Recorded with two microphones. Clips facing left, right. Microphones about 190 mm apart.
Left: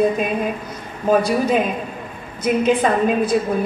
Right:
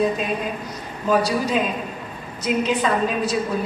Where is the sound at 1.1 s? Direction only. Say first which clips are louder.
Left 4 dB; 50° left (ahead or behind).